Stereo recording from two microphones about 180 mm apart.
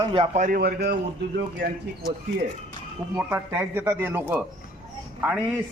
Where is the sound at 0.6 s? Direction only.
60° right (ahead or behind).